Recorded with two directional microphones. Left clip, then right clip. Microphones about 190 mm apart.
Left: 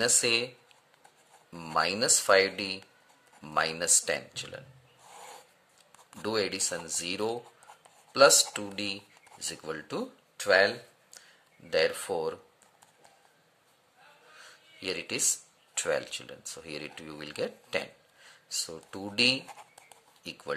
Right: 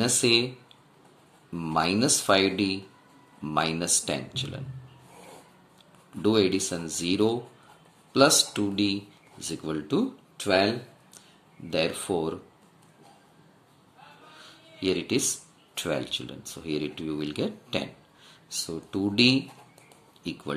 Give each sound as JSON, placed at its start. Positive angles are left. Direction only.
{"t": 0.0, "sound": "speech", "side_deg": 40}
{"t": 1.5, "sound": "speech", "side_deg": 40}
{"t": 6.2, "sound": "speech", "side_deg": 40}
{"t": 11.7, "sound": "speech", "side_deg": 40}
{"t": 14.4, "sound": "music", "side_deg": 35}
{"t": 15.7, "sound": "speech", "side_deg": 40}